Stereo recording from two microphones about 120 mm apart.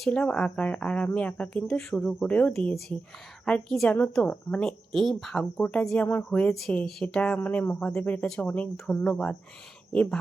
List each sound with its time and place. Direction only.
0.0 s speech: 5° left (ahead or behind)
4.6 s speech: centre (ahead or behind)